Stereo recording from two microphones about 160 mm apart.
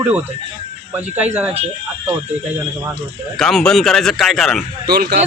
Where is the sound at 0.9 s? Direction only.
10° right (ahead or behind).